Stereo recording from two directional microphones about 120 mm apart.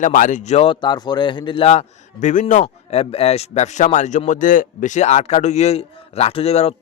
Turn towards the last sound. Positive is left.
turn(degrees=60)  # may be behind; listen again after turning